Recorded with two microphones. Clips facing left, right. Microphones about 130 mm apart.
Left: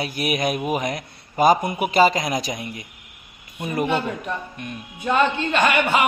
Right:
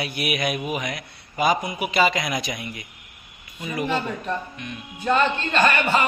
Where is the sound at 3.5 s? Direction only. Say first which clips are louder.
Left 3 dB; 55° left (ahead or behind).